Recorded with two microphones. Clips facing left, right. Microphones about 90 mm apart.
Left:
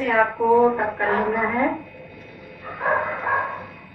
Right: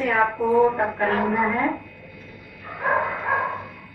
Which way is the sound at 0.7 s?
35° left (ahead or behind).